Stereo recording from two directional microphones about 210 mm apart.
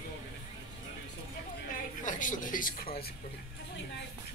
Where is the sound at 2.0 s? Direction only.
40° left (ahead or behind).